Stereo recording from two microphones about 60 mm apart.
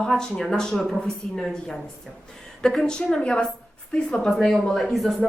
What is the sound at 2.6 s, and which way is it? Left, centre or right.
Speech, centre.